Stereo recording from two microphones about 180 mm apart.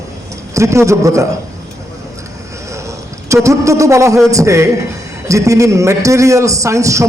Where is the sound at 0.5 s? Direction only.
15° right (ahead or behind).